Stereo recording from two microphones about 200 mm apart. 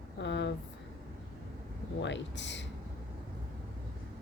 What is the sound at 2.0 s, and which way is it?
Speech, 65° left (ahead or behind).